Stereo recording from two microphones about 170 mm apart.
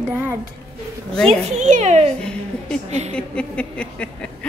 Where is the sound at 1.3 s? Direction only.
40° right (ahead or behind).